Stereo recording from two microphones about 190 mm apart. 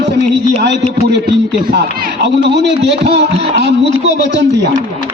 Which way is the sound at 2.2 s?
65° right (ahead or behind).